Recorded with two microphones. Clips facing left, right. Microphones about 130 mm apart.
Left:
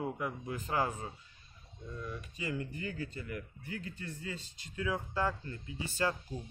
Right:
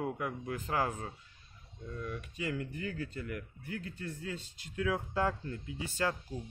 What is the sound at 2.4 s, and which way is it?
Speech, 70° right (ahead or behind).